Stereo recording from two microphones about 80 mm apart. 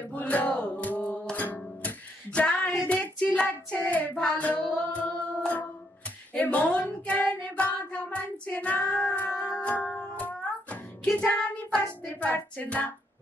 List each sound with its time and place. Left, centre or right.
0.1 s music: centre
3.3 s hands: centre
4.4 s singing: centre
7.5 s child singing: centre
9.3 s music: centre
11.1 s child singing: centre
12.0 s hands: centre